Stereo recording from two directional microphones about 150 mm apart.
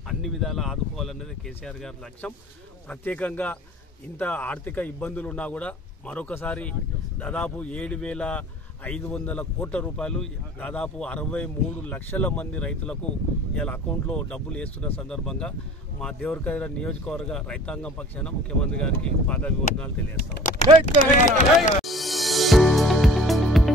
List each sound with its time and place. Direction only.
0.2 s speech: centre (ahead or behind)
20.5 s speech: 60° left (ahead or behind)
21.8 s music: centre (ahead or behind)